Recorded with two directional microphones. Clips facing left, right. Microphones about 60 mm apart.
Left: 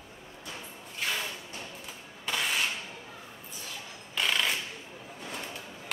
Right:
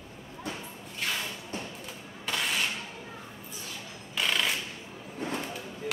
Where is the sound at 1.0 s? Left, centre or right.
Centre.